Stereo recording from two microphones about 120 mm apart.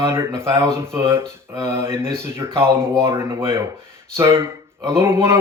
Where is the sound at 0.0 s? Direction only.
20° right (ahead or behind).